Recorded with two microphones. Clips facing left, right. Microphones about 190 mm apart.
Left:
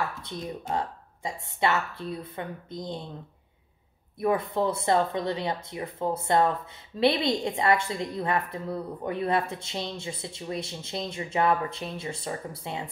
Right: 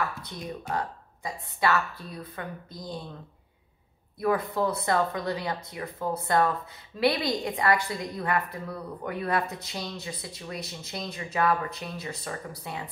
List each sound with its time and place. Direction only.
0.2 s a woman's voice: 25° left (ahead or behind)
4.2 s a woman's voice: 25° left (ahead or behind)